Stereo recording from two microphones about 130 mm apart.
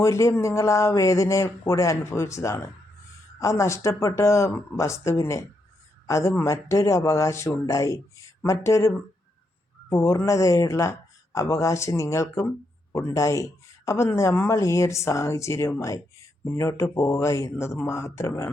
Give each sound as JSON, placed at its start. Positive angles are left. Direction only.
{"t": 0.0, "sound": "speech", "side_deg": 25}
{"t": 9.9, "sound": "speech", "side_deg": 25}